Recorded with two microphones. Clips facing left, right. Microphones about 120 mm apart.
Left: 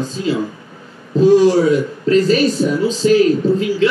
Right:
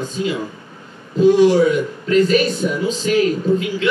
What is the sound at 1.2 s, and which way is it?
A man's voice, 35° left (ahead or behind).